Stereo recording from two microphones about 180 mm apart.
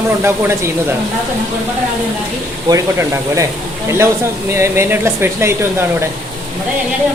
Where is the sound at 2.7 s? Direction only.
20° right (ahead or behind).